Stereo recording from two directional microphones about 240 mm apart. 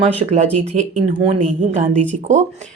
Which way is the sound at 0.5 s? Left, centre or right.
Right.